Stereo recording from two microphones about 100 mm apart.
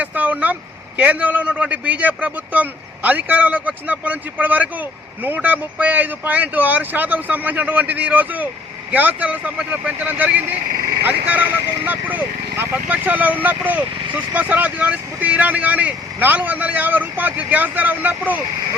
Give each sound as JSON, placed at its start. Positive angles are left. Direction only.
{"t": 0.0, "sound": "speech", "side_deg": -15}